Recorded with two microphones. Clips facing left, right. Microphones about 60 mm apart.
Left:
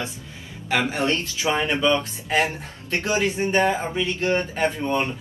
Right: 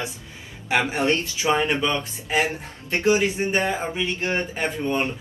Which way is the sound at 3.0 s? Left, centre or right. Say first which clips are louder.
Right 4 dB; centre.